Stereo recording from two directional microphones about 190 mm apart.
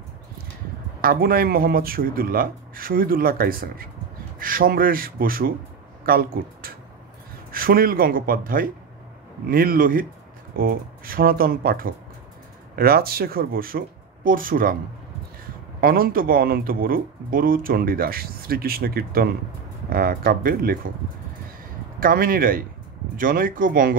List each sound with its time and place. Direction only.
1.0 s speech: 50° right (ahead or behind)
15.8 s speech: 50° right (ahead or behind)
22.0 s speech: 50° right (ahead or behind)